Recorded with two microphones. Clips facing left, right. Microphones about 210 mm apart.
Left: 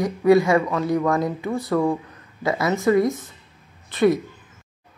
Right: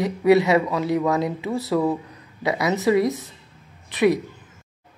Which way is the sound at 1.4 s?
5° right (ahead or behind).